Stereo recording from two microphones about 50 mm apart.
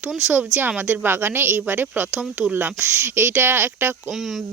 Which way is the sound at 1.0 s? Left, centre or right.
Right.